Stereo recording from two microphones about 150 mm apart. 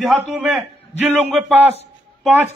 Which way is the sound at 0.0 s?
Centre (ahead or behind).